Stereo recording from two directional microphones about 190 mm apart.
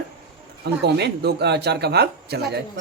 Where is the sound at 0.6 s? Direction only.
60° right (ahead or behind).